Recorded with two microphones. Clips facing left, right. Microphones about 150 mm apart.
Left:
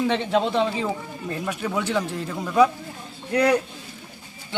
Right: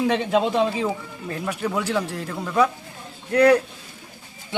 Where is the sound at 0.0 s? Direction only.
10° right (ahead or behind).